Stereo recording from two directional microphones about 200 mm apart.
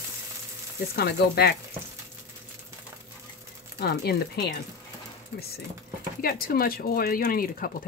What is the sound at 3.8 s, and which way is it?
Speech, 55° left (ahead or behind).